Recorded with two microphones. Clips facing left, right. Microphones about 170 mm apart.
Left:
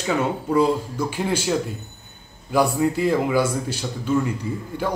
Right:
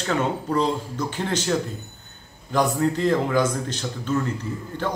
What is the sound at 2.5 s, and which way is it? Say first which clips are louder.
A man's voice: left 2 dB; 10° left (ahead or behind).